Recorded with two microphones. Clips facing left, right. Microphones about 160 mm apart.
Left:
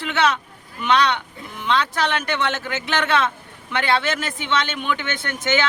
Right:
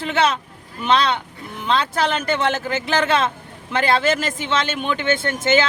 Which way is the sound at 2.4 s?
30° right (ahead or behind).